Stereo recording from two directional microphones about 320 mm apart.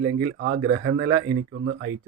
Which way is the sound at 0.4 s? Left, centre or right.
Right.